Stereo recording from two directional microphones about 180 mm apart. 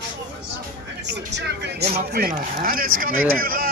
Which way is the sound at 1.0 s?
70° right (ahead or behind).